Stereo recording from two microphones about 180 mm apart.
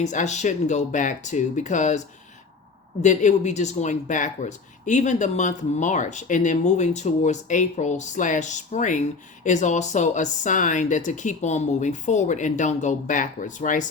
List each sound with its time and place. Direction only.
0.0 s speech: 40° left (ahead or behind)
3.0 s speech: 40° left (ahead or behind)